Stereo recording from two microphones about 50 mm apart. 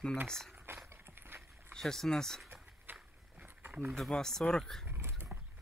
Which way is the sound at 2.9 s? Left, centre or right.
Right.